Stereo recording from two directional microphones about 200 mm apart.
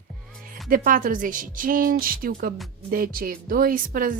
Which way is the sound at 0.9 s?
40° right (ahead or behind).